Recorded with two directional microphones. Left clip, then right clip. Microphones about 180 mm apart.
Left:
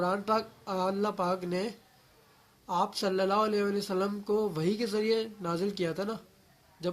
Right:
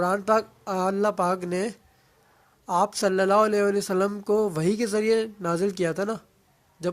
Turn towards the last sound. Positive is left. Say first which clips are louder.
# right 5 dB
turn(degrees=-50)  # may be behind; listen again after turning